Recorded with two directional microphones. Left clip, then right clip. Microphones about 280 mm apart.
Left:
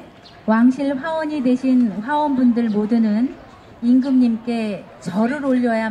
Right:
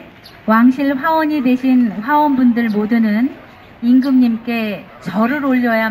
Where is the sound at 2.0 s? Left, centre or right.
Left.